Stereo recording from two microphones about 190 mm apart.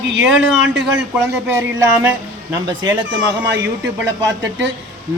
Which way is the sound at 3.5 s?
70° right (ahead or behind).